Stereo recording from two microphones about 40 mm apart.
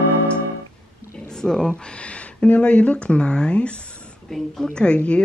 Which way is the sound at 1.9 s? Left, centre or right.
Left.